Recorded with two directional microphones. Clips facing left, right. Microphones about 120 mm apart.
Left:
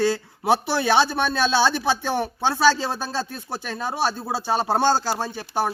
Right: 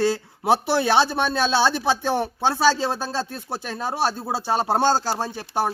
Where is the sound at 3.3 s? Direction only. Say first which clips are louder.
Right 1 dB; 30° right (ahead or behind).